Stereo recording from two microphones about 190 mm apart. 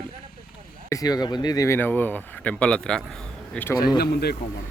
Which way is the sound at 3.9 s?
55° left (ahead or behind).